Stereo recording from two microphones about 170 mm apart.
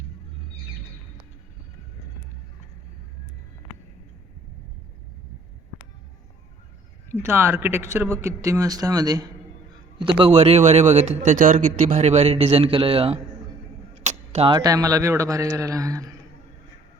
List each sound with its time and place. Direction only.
7.1 s a man's voice: 15° right (ahead or behind); by 13.1 s 35° right (ahead or behind)
13.9 s a sound: 40° right (ahead or behind)
14.5 s a man's voice: 20° right (ahead or behind)